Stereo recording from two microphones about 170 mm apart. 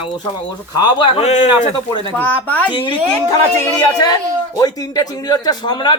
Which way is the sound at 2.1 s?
10° left (ahead or behind).